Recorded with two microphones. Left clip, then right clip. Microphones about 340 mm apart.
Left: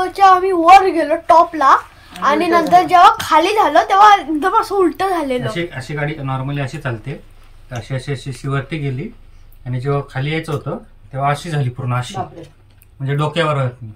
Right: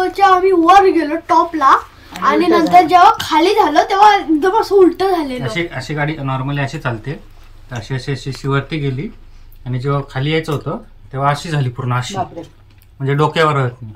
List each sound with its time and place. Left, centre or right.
0.0 s a woman's voice: centre
5.5 s speech: centre
7.9 s speech: centre
13.0 s speech: centre